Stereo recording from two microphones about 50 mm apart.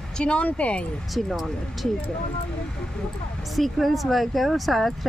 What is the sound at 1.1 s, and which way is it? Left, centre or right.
Speech, centre.